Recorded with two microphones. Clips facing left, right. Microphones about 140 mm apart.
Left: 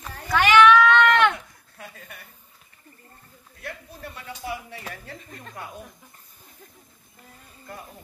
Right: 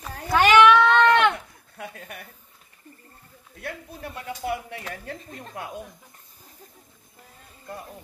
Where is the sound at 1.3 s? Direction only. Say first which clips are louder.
Right 3 dB; 60° right (ahead or behind).